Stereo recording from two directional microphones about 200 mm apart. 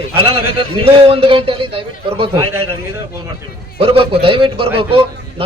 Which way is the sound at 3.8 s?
25° right (ahead or behind).